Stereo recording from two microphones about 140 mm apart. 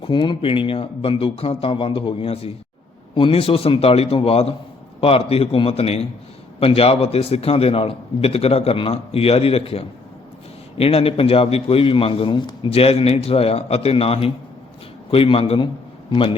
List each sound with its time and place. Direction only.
0.0 s a man's voice: 35° left (ahead or behind)